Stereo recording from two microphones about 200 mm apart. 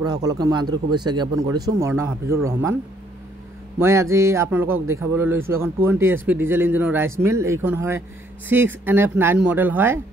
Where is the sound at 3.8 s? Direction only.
15° right (ahead or behind).